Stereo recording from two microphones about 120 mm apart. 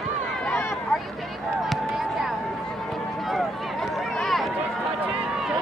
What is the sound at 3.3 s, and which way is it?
Run, centre (ahead or behind).